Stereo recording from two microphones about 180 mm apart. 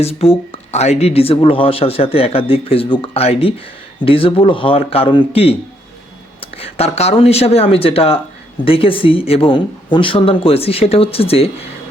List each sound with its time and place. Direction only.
0.0 s speech: 35° left (ahead or behind)